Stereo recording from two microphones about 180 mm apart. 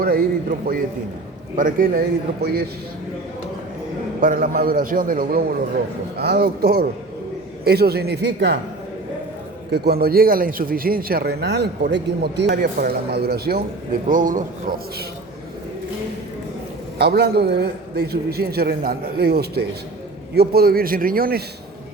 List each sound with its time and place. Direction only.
0.7 s a man's voice: 55° right (ahead or behind)
4.2 s a man's voice: 50° right (ahead or behind); by 8.5 s 70° right (ahead or behind)
9.7 s a man's voice: 60° right (ahead or behind)
14.1 s a man's voice: 50° right (ahead or behind)
17.0 s a man's voice: 65° right (ahead or behind)